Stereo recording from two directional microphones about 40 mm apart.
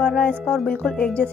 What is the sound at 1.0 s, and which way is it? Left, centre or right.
Speech, left.